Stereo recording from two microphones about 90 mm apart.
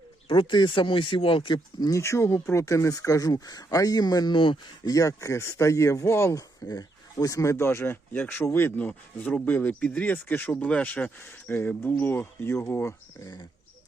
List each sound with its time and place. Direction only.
0.3 s speech: 65° left (ahead or behind)
1.5 s speech: 45° left (ahead or behind)
2.0 s speech: 30° left (ahead or behind)
4.9 s speech: 35° left (ahead or behind)
6.7 s speech: 40° left (ahead or behind)
13.2 s speech: 55° left (ahead or behind)